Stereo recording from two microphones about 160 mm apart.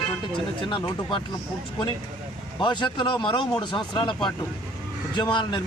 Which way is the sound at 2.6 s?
30° left (ahead or behind).